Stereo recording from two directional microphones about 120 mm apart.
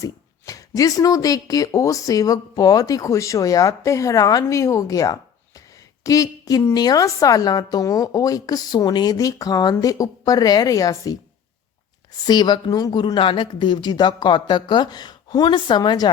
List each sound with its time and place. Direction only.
0.0 s a woman's voice: 30° left (ahead or behind)
12.2 s a woman's voice: 35° left (ahead or behind)